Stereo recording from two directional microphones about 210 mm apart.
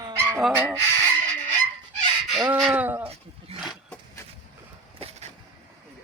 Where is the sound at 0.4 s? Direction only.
10° right (ahead or behind).